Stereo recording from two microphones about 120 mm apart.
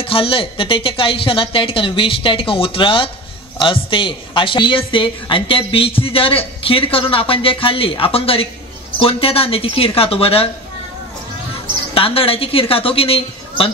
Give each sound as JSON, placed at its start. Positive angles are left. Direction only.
{"t": 0.0, "sound": "a woman's voice", "side_deg": 50}
{"t": 11.9, "sound": "a woman's voice", "side_deg": 50}